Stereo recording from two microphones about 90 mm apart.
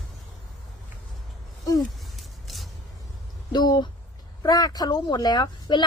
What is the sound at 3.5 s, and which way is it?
A woman's voice, 50° left (ahead or behind).